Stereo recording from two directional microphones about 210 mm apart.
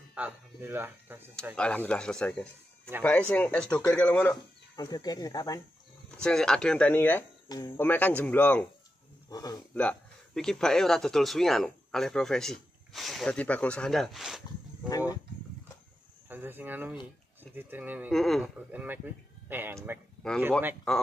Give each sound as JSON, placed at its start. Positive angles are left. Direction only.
{"t": 0.1, "sound": "speech", "side_deg": -10}
{"t": 1.6, "sound": "speech", "side_deg": 5}
{"t": 4.7, "sound": "speech", "side_deg": 20}
{"t": 6.1, "sound": "speech", "side_deg": 5}
{"t": 9.8, "sound": "speech", "side_deg": 5}
{"t": 14.9, "sound": "speech", "side_deg": 15}
{"t": 16.3, "sound": "speech", "side_deg": -10}
{"t": 20.2, "sound": "speech", "side_deg": 5}